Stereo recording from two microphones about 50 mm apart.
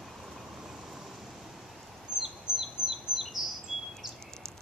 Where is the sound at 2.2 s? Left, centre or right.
Centre.